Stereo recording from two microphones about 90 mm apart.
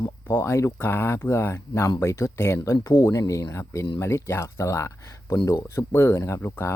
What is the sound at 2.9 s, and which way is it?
Speech, 30° left (ahead or behind).